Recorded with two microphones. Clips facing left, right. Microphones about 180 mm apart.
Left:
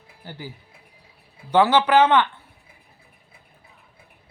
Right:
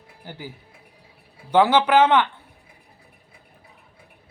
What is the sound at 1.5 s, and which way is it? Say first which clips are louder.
Speech: even; 10° right (ahead or behind).